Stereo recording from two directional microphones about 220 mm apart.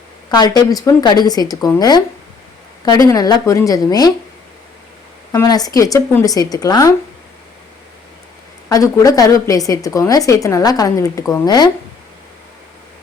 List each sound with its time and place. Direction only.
0.3 s a woman's voice: 20° left (ahead or behind)
5.3 s a woman's voice: 15° left (ahead or behind)
8.7 s a woman's voice: 15° left (ahead or behind)